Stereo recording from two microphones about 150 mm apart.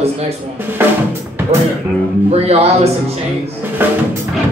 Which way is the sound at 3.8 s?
15° right (ahead or behind).